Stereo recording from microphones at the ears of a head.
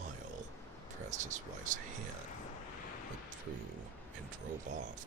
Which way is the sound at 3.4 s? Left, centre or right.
Right.